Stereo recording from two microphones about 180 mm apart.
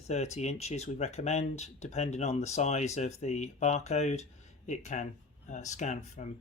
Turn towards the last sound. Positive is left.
turn(degrees=40)  # may be behind; listen again after turning